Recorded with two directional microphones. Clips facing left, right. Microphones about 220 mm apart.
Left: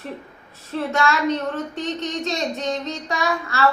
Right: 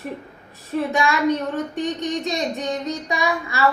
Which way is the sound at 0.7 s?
15° right (ahead or behind).